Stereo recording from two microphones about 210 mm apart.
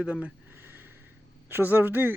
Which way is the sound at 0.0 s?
5° right (ahead or behind).